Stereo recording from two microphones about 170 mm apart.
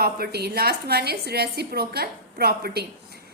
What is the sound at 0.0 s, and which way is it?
A woman's voice, 70° right (ahead or behind).